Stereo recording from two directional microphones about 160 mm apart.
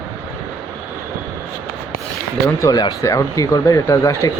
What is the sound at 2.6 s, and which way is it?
Speech, 20° left (ahead or behind).